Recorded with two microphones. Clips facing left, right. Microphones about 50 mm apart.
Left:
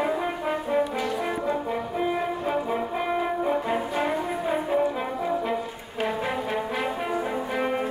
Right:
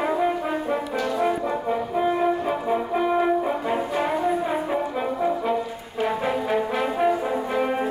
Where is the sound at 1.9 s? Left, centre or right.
Centre.